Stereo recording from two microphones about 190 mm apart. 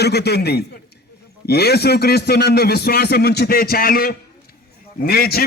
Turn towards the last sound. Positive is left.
turn(degrees=55)  # may be behind; listen again after turning